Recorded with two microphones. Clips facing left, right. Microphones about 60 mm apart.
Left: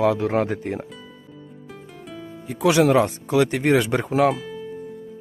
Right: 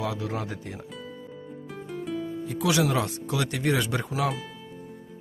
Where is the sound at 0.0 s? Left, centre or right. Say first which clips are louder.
Left 11 dB; left.